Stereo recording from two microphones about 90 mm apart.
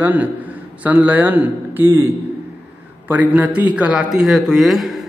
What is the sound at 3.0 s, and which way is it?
A man's voice, 20° right (ahead or behind).